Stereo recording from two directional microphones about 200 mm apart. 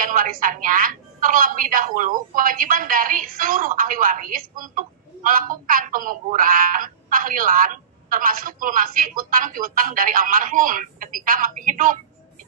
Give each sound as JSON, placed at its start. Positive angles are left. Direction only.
{"t": 0.0, "sound": "a woman's voice", "side_deg": -45}